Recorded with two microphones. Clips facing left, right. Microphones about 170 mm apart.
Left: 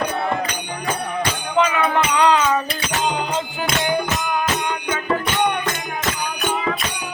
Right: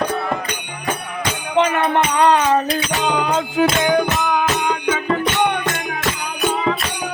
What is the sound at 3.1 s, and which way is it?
Music, 70° right (ahead or behind).